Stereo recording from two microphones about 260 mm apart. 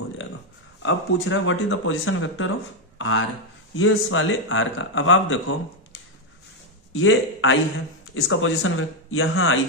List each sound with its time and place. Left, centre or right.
0.8 s a man's voice: left
6.9 s a man's voice: left